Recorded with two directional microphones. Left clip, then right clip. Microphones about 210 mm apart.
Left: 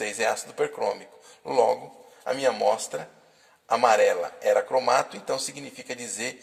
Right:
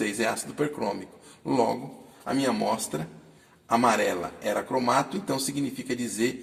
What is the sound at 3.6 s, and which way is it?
A man's voice, 30° left (ahead or behind).